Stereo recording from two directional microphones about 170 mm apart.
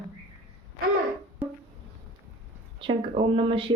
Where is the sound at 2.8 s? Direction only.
30° right (ahead or behind).